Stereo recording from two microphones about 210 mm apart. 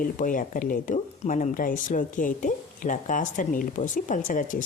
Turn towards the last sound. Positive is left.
turn(degrees=40)  # may be behind; listen again after turning